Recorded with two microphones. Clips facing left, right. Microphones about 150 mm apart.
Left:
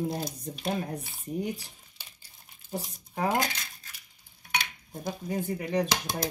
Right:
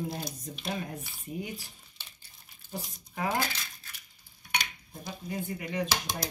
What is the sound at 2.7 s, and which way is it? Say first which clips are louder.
Speech: left 4 dB; 35° left (ahead or behind).